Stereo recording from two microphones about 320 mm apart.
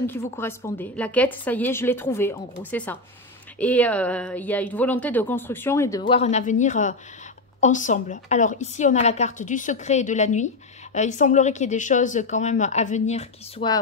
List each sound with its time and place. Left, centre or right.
0.0 s a woman's voice: centre